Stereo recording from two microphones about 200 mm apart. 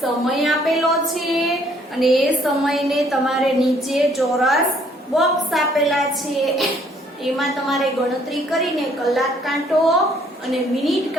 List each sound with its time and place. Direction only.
0.0 s a woman's voice: centre (ahead or behind)